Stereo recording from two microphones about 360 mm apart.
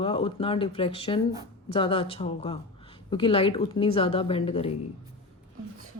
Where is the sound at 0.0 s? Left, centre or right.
Centre.